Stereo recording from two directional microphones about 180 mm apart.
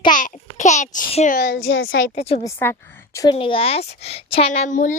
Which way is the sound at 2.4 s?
15° left (ahead or behind).